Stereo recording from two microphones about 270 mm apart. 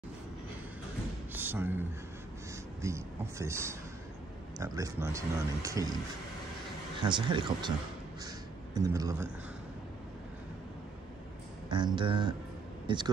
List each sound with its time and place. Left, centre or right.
1.3 s speech: centre
7.0 s speech: centre
8.7 s speech: centre
11.7 s speech: centre